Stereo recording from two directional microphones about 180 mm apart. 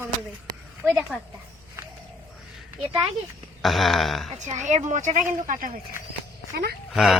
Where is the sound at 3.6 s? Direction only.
Centre (ahead or behind).